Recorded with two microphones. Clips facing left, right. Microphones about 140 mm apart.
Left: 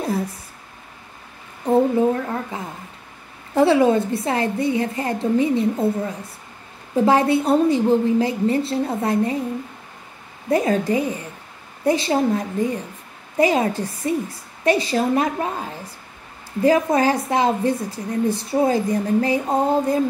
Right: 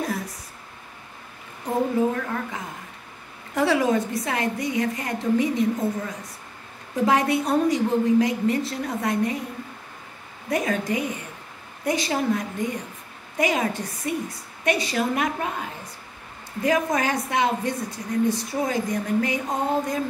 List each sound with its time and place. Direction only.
0.0 s speech: 30° left (ahead or behind)
3.5 s a woman's voice: 30° left (ahead or behind)
10.5 s a woman's voice: 30° left (ahead or behind)
16.6 s a woman's voice: 30° left (ahead or behind)